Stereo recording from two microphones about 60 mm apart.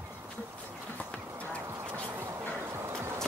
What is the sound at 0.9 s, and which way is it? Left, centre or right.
Horse, left.